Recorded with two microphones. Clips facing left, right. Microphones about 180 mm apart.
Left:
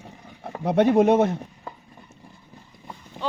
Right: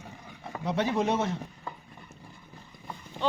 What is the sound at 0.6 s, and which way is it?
Speech, 55° left (ahead or behind).